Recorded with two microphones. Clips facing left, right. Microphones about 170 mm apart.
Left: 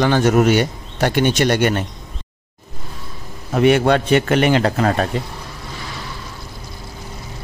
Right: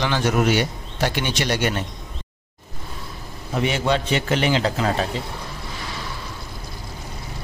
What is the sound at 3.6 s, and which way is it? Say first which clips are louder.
Speech: left 8 dB; 60° left (ahead or behind).